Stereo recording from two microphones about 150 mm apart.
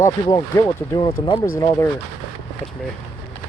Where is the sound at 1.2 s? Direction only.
30° left (ahead or behind).